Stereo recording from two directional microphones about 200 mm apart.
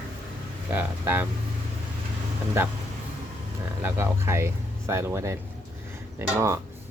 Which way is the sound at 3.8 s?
15° right (ahead or behind).